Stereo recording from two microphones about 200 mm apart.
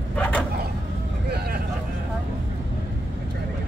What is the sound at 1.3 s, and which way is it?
Vehicle, 50° right (ahead or behind).